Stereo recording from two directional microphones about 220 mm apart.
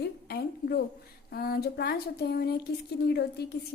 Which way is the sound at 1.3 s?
45° left (ahead or behind).